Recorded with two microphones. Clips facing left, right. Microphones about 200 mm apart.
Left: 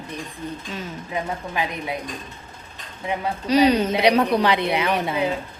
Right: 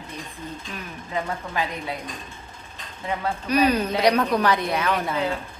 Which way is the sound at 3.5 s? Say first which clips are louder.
Left 4 dB; 85° left.